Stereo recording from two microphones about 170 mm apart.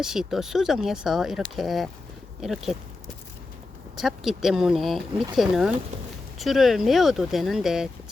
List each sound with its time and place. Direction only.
0.0 s speech: 5° right (ahead or behind)
3.9 s speech: centre (ahead or behind)